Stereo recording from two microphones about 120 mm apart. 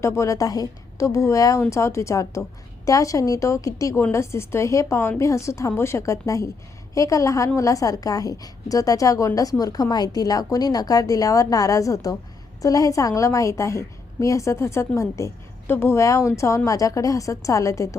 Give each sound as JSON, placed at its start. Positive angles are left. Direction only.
{"t": 0.0, "sound": "a woman's voice", "side_deg": 25}